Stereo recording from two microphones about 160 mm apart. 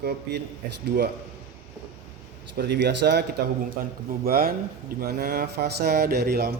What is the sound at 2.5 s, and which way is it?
Speech, 90° right.